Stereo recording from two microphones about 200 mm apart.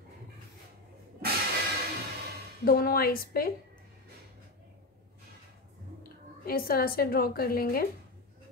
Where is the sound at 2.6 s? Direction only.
50° left (ahead or behind).